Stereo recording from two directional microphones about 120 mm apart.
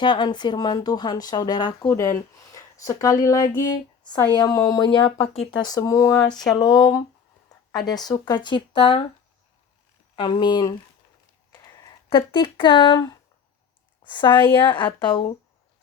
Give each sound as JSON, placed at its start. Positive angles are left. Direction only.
{"t": 0.0, "sound": "speech", "side_deg": 40}
{"t": 1.9, "sound": "speech", "side_deg": 25}
{"t": 6.2, "sound": "a sound", "side_deg": 5}
{"t": 6.5, "sound": "speech", "side_deg": 35}
{"t": 10.2, "sound": "speech", "side_deg": 45}